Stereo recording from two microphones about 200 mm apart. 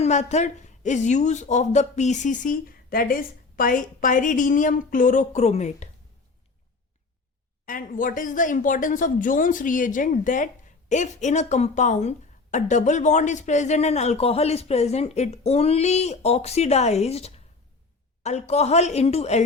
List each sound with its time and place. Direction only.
0.0 s a woman's voice: 35° left (ahead or behind)
7.6 s a woman's voice: 45° left (ahead or behind)